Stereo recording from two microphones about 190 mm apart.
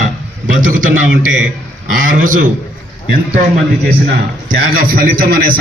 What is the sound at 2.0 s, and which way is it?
Speech, 45° right (ahead or behind).